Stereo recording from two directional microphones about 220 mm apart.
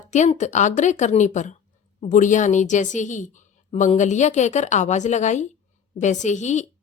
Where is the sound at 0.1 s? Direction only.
30° left (ahead or behind).